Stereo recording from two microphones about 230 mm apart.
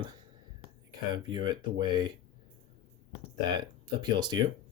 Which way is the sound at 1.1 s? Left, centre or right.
Centre.